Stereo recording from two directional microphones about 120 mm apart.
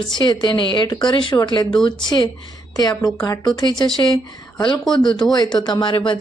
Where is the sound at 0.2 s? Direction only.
40° left (ahead or behind).